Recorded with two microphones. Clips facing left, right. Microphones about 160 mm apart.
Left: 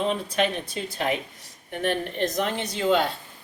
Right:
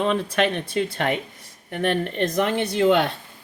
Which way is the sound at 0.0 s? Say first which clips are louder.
Right 3 dB; 65° right (ahead or behind).